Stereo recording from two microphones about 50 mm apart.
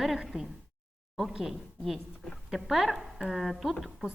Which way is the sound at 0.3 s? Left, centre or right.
Right.